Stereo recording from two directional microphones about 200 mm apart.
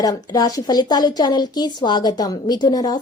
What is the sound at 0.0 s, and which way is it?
A woman's voice, 20° left (ahead or behind).